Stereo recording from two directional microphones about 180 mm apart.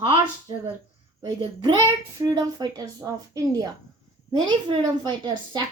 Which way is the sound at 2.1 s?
20° right (ahead or behind).